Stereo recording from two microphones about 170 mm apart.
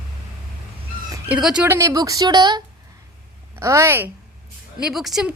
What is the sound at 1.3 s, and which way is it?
A woman's voice, 5° right (ahead or behind).